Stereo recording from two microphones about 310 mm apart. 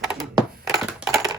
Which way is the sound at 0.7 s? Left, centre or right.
Centre.